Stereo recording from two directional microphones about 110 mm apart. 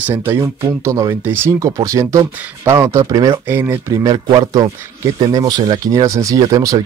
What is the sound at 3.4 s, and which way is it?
Speech, 20° right (ahead or behind).